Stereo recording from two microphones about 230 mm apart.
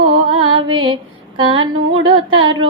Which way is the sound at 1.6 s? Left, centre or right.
Right.